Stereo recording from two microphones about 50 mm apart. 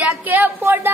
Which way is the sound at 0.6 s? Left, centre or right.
Right.